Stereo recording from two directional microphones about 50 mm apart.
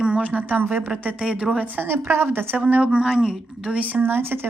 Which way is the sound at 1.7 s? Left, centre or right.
Right.